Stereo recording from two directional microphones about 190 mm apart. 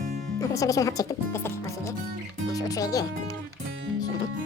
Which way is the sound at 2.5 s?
20° left (ahead or behind).